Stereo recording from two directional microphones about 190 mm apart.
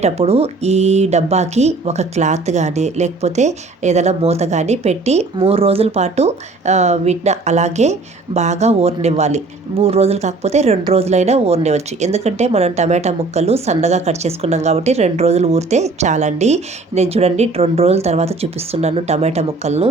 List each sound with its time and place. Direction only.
0.0 s speech: 35° right (ahead or behind)